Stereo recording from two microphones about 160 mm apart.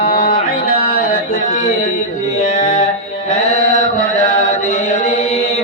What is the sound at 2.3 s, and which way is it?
Music, 50° left (ahead or behind).